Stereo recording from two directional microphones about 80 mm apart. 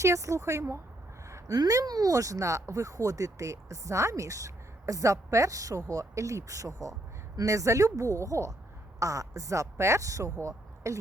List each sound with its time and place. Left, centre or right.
0.0 s speech: right
1.3 s speech: right